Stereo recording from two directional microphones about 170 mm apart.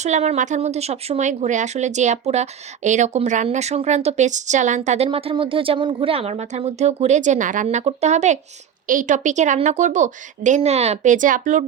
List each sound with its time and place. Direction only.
0.0 s speech: 40° right (ahead or behind)
5.0 s a woman's voice: 30° right (ahead or behind); by 11.6 s 50° right (ahead or behind)